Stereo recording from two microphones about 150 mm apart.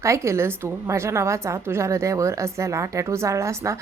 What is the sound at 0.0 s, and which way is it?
A woman's voice, 20° right (ahead or behind).